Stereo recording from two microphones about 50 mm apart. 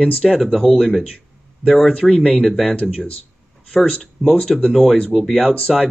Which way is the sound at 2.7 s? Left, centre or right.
Left.